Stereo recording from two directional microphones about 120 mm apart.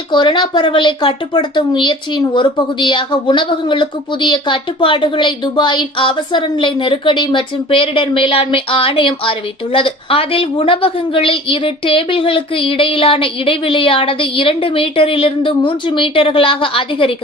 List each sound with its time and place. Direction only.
0.1 s speech: 40° left (ahead or behind)